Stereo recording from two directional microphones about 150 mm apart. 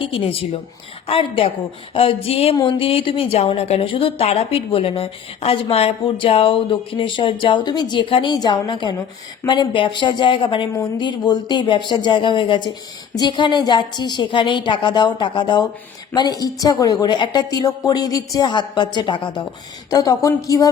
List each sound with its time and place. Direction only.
0.1 s a woman's voice: 35° left (ahead or behind)